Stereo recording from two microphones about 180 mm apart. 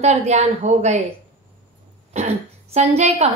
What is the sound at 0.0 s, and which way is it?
Speech, 40° right (ahead or behind).